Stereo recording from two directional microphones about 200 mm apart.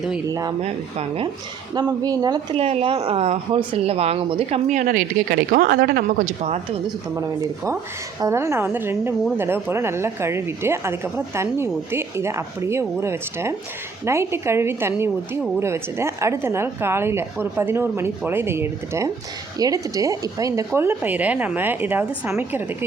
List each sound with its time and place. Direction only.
0.3 s speech: 15° right (ahead or behind)
0.6 s a woman's voice: 30° right (ahead or behind)
1.7 s a woman's voice: 20° right (ahead or behind)
2.6 s a woman's voice: 30° right (ahead or behind); by 6.1 s 50° right (ahead or behind)
6.2 s a woman's voice: 35° right (ahead or behind)
7.2 s speech: 15° right (ahead or behind)